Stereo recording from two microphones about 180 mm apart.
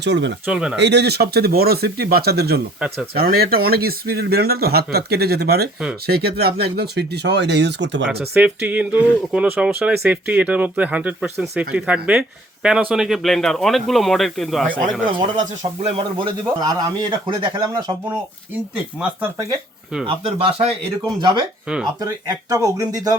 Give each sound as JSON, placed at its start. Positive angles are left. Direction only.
{"t": 0.0, "sound": "speech", "side_deg": -75}
{"t": 0.4, "sound": "speech", "side_deg": -5}
{"t": 0.8, "sound": "speech", "side_deg": -70}
{"t": 8.2, "sound": "speech", "side_deg": -10}
{"t": 15.4, "sound": "a man's voice", "side_deg": -35}
{"t": 18.9, "sound": "speech", "side_deg": -15}
{"t": 20.1, "sound": "a man's voice", "side_deg": -35}